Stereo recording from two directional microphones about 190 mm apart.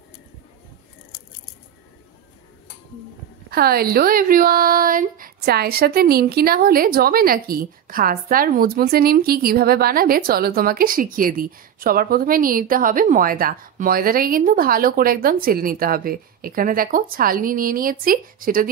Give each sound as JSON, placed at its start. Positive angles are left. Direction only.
{"t": 3.4, "sound": "speech", "side_deg": -55}